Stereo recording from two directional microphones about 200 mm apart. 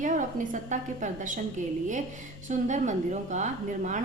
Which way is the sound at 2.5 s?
35° right (ahead or behind).